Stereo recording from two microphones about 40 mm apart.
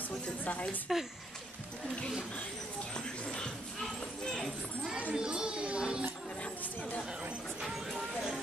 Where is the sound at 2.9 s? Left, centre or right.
Centre.